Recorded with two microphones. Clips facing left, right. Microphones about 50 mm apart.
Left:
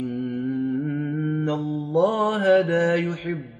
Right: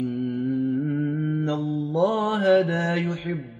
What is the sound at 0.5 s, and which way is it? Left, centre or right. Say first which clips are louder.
Music: right 1 dB; centre.